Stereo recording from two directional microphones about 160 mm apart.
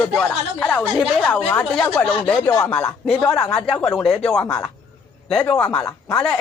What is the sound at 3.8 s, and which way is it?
Speech, centre (ahead or behind).